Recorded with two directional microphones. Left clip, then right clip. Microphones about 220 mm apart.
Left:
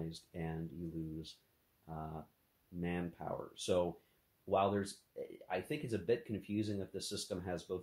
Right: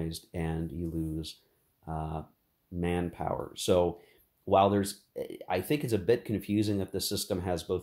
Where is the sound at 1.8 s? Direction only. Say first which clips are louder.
Right 10 dB; 35° right (ahead or behind).